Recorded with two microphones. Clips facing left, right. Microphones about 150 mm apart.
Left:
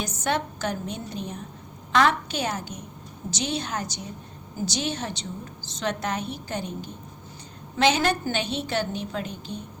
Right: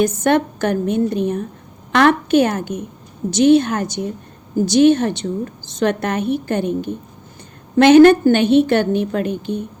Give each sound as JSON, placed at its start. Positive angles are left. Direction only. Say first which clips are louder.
{"t": 0.2, "sound": "a woman's voice", "louder": "right 11 dB", "side_deg": -55}